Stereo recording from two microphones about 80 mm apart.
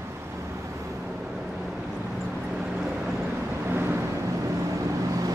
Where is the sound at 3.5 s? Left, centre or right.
Right.